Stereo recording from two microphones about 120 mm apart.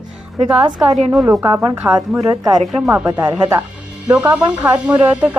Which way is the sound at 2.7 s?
10° right (ahead or behind).